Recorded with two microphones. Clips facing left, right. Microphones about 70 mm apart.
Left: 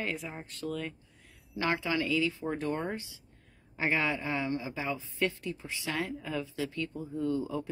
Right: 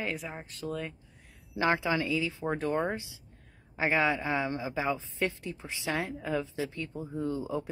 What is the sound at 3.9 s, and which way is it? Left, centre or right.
Speech, right.